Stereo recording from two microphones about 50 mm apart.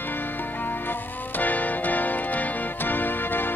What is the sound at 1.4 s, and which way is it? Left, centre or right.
Music, left.